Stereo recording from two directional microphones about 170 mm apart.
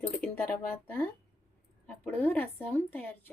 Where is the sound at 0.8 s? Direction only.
10° left (ahead or behind).